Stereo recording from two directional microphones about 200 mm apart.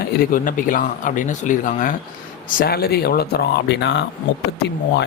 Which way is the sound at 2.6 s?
50° left (ahead or behind).